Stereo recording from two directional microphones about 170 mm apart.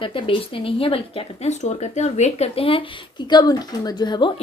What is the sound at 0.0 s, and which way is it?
Speech, 30° left (ahead or behind).